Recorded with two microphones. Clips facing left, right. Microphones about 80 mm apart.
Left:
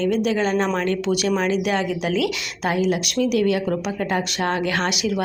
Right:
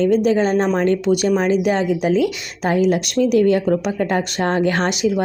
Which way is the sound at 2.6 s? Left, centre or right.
Right.